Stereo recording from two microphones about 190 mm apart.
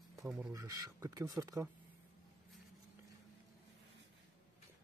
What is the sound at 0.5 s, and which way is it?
Speech, 15° right (ahead or behind).